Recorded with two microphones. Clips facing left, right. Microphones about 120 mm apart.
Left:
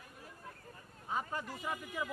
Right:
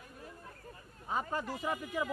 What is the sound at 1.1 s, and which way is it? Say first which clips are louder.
Speech: right 3 dB; 70° right (ahead or behind).